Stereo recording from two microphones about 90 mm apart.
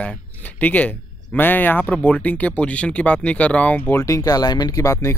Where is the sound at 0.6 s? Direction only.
15° left (ahead or behind).